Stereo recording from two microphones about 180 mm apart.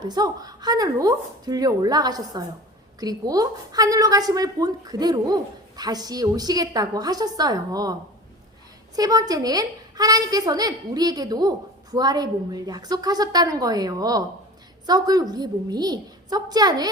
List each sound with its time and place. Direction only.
0.0 s a woman's voice: 20° right (ahead or behind)
9.0 s a woman's voice: 20° right (ahead or behind)